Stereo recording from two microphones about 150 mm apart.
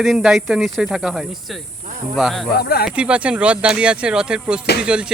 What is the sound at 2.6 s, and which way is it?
Speech, 90° left.